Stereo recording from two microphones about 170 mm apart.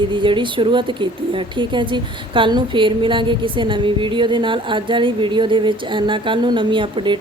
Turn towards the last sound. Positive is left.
turn(degrees=-30)  # may be behind; listen again after turning